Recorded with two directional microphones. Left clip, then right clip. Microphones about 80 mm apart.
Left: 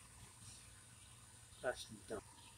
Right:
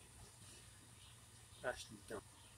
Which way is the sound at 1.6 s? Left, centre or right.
Centre.